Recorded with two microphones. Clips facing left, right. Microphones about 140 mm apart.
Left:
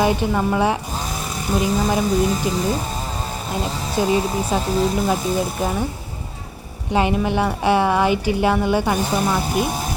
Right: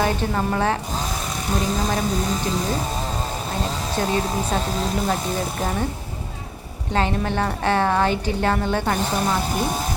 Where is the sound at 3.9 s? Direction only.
10° left (ahead or behind).